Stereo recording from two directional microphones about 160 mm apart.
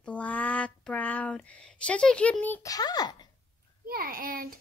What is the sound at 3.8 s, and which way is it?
Speech, 65° right (ahead or behind).